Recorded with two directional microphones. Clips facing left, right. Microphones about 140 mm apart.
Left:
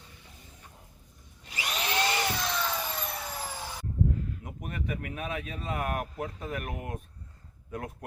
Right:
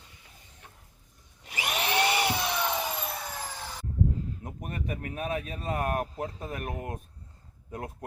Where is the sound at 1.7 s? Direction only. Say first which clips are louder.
Right 3 dB; 15° right (ahead or behind).